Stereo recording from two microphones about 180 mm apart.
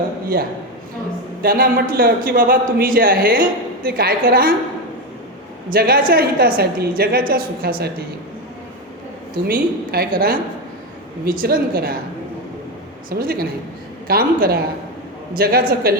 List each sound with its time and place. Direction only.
1.4 s a man's voice: 55° right (ahead or behind)
5.7 s a woman's voice: 55° right (ahead or behind)
9.5 s a man's voice: 55° right (ahead or behind)
13.1 s a woman's voice: 55° right (ahead or behind)